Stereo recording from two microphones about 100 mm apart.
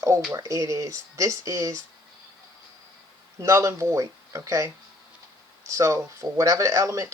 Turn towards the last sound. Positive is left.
turn(degrees=-30)  # may be behind; listen again after turning